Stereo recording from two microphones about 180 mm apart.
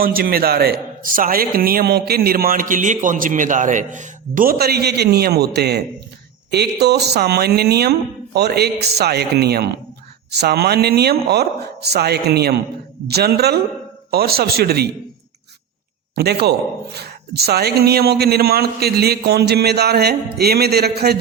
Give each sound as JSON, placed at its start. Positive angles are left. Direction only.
{"t": 0.0, "sound": "a man's voice", "side_deg": -55}
{"t": 16.1, "sound": "a man's voice", "side_deg": -65}